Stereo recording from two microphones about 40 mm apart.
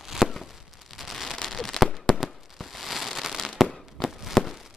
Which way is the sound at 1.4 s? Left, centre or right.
Centre.